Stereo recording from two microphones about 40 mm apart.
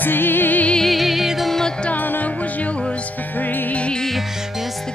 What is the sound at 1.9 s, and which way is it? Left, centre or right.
Music, left.